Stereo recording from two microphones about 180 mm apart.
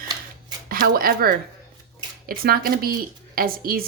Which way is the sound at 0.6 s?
55° right (ahead or behind).